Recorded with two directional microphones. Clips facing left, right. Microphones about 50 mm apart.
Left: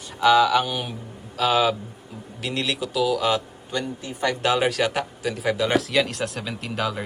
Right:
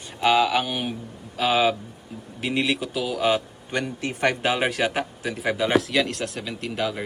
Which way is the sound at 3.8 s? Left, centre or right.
Right.